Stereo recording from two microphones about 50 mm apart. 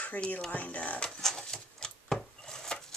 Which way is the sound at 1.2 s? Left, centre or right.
Centre.